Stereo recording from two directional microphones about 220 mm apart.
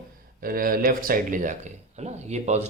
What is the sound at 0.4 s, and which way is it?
Speech, 40° right (ahead or behind).